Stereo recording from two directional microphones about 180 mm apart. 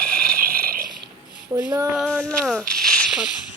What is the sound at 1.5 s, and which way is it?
Child singing, 20° right (ahead or behind).